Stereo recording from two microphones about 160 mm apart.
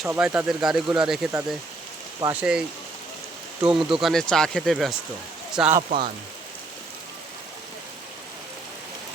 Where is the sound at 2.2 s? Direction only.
15° right (ahead or behind).